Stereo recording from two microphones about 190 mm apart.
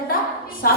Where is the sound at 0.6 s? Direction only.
50° left (ahead or behind).